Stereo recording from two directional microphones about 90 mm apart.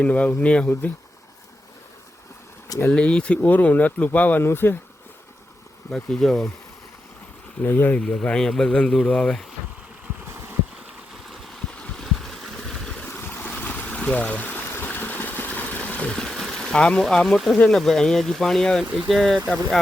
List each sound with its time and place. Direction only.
0.0 s speech: 15° left (ahead or behind)
2.6 s speech: 30° left (ahead or behind)
2.9 s speech: 10° left (ahead or behind)
5.9 s speech: 5° left (ahead or behind)
7.6 s speech: 20° left (ahead or behind)
11.8 s boat: 5° left (ahead or behind)
13.1 s waves: 25° left (ahead or behind)
13.6 s stream: 20° left (ahead or behind); by 17.6 s centre (ahead or behind)
17.7 s speech: 5° left (ahead or behind)